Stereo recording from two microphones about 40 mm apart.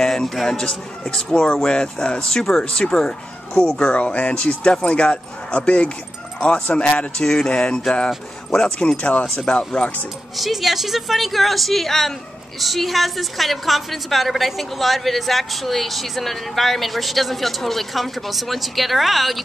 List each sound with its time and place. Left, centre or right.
0.0 s a man's voice: centre
8.9 s speech: left
9.5 s speech: left
10.3 s a woman's voice: centre